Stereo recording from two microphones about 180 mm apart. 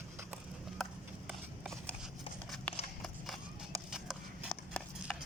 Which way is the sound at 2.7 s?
5° left (ahead or behind).